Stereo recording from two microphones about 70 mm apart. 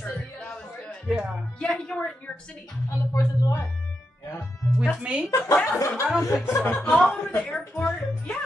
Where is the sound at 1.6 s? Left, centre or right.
Centre.